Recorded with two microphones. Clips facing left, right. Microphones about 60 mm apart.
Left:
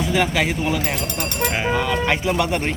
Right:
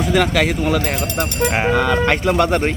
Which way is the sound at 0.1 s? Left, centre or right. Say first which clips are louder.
Right 5 dB; right.